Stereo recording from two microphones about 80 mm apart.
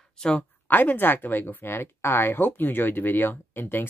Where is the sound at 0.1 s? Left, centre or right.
Centre.